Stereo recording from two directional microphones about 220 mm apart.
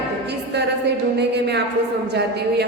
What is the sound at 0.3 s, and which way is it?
Music, 50° right (ahead or behind).